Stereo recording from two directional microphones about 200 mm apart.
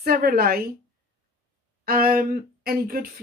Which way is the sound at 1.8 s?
45° right (ahead or behind).